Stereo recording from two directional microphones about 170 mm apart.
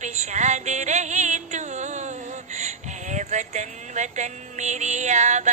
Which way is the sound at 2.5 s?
45° right (ahead or behind).